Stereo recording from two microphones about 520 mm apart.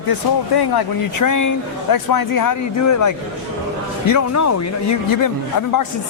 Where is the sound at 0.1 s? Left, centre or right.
Left.